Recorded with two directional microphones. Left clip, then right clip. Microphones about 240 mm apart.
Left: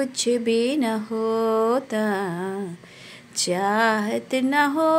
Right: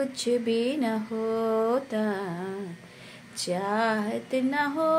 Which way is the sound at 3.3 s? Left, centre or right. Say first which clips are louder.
Left 6 dB; left.